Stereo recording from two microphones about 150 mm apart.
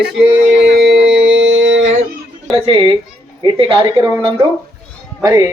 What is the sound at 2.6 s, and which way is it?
Speech, 40° right (ahead or behind).